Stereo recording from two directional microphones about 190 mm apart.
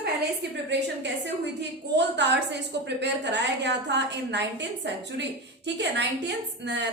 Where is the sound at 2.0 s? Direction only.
65° right (ahead or behind).